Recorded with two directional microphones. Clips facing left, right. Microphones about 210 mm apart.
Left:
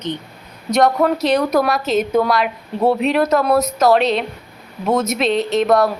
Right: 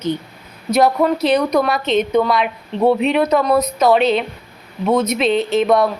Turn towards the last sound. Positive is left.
turn(degrees=0)  # may be behind; listen again after turning